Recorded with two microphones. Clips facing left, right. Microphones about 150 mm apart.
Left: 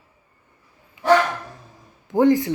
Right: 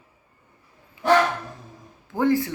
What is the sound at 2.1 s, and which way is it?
Speech, 20° left (ahead or behind).